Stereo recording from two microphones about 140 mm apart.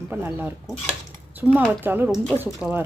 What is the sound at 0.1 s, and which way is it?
Speech, 15° right (ahead or behind).